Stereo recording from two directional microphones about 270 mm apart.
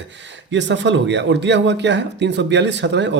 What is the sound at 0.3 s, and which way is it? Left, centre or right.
Speech, right.